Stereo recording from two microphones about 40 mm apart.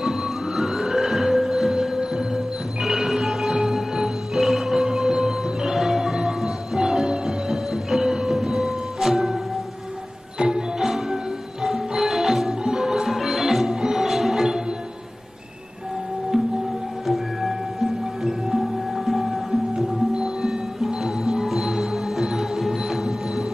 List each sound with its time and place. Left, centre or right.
0.0 s music: centre
10.4 s music: right
10.8 s music: centre
17.0 s music: centre